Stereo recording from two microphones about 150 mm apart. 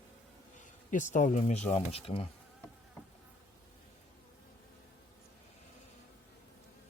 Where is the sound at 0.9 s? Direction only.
55° left (ahead or behind).